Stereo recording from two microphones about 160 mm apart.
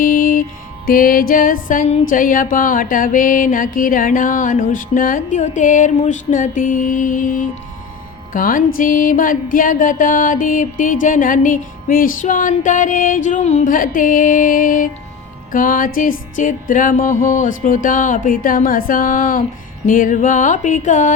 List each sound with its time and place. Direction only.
0.0 s music: 60° left (ahead or behind)